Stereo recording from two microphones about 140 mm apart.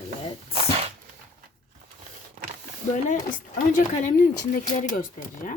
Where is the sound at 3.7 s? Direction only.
70° left (ahead or behind).